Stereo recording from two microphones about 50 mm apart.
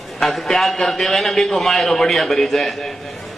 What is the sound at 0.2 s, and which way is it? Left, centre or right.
A man's voice, centre.